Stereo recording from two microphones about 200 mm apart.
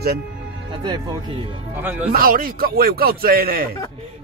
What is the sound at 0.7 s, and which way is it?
Speech, 25° right (ahead or behind).